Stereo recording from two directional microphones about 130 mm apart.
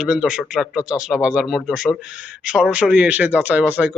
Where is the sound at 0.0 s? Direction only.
5° right (ahead or behind).